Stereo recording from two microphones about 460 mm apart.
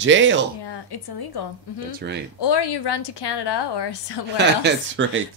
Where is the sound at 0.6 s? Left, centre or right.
Left.